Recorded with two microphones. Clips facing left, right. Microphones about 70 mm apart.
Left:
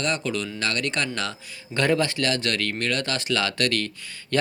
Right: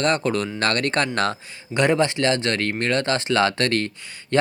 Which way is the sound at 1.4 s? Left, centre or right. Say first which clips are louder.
Left 1 dB; right.